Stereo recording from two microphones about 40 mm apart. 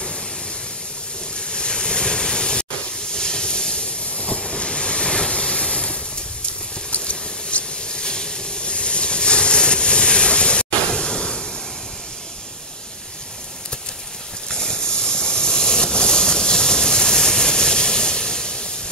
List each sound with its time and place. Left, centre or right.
1.5 s waves: left
3.1 s train: centre
4.4 s waves: centre
6.9 s hiss: left
14.5 s a sound: centre